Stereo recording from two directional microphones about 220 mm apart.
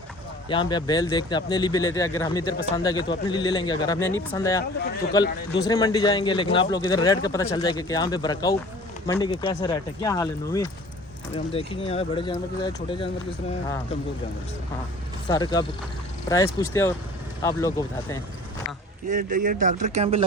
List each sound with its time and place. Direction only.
0.4 s speech: 20° left (ahead or behind)
11.3 s speech: 25° left (ahead or behind)
15.3 s speech: 20° left (ahead or behind)
19.0 s speech: 40° right (ahead or behind)